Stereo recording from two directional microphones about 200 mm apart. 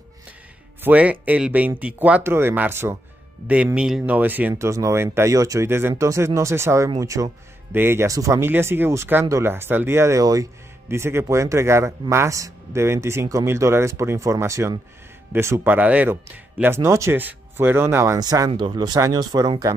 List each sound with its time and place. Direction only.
0.8 s speech: 10° right (ahead or behind)